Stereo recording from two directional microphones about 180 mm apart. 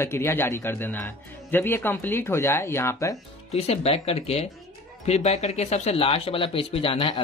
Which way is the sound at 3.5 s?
35° left (ahead or behind).